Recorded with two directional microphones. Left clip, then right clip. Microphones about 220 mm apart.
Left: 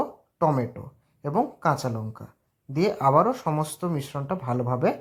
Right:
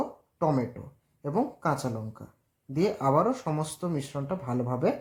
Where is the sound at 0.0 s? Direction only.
20° left (ahead or behind).